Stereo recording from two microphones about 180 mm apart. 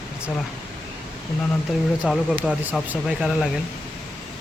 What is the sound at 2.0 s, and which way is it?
Speech, centre (ahead or behind).